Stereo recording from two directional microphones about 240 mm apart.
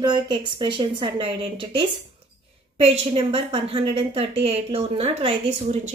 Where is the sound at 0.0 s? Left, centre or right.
Centre.